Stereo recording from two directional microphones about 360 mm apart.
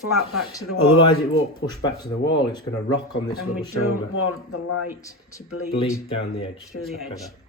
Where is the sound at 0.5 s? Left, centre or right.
Centre.